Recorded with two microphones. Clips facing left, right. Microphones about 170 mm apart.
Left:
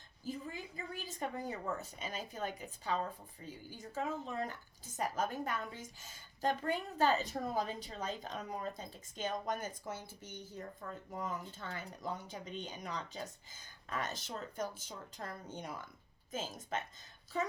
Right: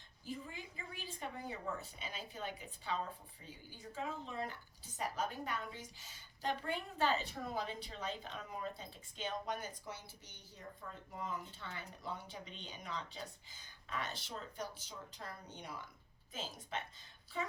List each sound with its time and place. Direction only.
0.3 s a woman's voice: 40° left (ahead or behind)